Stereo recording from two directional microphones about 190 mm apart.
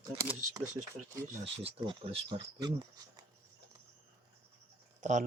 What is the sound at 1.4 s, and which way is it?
Speech, 30° right (ahead or behind).